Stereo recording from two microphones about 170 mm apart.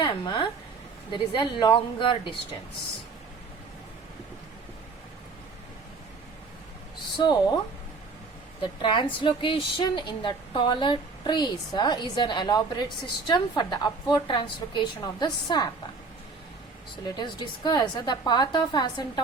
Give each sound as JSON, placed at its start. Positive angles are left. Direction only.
{"t": 0.0, "sound": "a woman's voice", "side_deg": 25}
{"t": 7.2, "sound": "a woman's voice", "side_deg": 25}
{"t": 8.6, "sound": "a woman's voice", "side_deg": 30}
{"t": 17.2, "sound": "a woman's voice", "side_deg": 25}